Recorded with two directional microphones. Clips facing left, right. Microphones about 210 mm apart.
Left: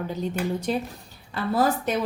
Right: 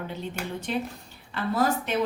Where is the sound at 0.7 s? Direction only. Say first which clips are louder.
Left 3 dB; 40° left (ahead or behind).